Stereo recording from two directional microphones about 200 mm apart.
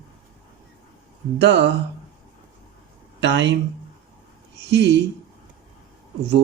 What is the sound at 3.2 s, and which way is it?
Speech, 60° right (ahead or behind).